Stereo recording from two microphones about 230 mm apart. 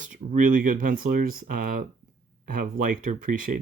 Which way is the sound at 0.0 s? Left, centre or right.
Right.